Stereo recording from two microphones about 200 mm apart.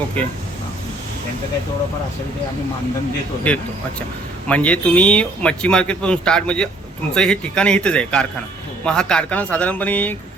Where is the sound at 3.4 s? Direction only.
5° left (ahead or behind).